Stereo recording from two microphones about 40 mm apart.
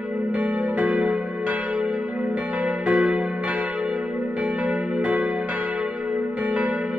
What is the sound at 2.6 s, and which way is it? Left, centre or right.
Change ringing, right.